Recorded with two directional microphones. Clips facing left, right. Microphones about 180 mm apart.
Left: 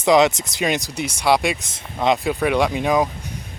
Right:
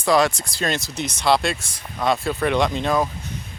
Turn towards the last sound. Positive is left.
turn(degrees=15)  # may be behind; listen again after turning